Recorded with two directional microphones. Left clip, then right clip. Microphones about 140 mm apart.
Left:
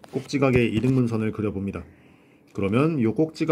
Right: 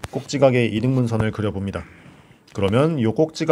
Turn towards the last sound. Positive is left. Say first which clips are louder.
# right 3 dB
turn(degrees=-35)  # may be behind; listen again after turning